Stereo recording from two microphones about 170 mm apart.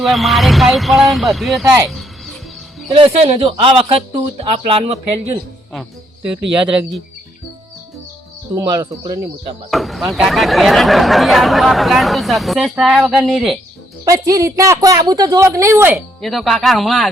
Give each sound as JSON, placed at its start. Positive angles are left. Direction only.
{"t": 0.0, "sound": "speech", "side_deg": 0}
{"t": 1.9, "sound": "music", "side_deg": 0}
{"t": 2.9, "sound": "speech", "side_deg": -35}
{"t": 6.7, "sound": "speech", "side_deg": -5}
{"t": 8.5, "sound": "speech", "side_deg": -20}
{"t": 9.6, "sound": "speech", "side_deg": 0}
{"t": 14.0, "sound": "speech", "side_deg": -20}
{"t": 16.0, "sound": "speech", "side_deg": 0}